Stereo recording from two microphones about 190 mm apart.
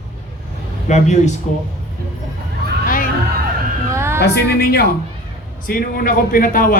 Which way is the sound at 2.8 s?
45° left (ahead or behind).